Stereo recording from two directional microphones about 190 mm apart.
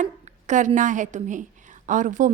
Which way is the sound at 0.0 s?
40° right (ahead or behind).